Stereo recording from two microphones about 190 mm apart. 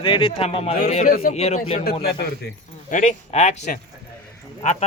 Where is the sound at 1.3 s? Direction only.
35° left (ahead or behind).